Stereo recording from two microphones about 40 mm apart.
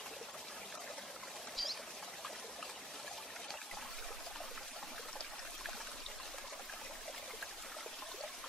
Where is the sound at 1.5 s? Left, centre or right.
Centre.